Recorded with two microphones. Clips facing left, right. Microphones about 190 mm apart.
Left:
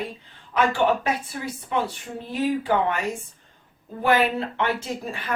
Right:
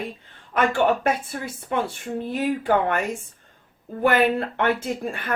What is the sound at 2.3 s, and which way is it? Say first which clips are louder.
Speech: even; 55° right (ahead or behind).